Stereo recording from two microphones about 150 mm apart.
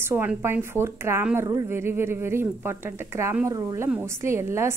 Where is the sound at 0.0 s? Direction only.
15° right (ahead or behind).